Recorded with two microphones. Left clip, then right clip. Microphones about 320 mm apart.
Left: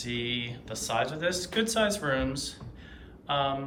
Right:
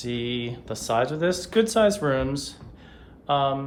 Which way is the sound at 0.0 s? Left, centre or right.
Centre.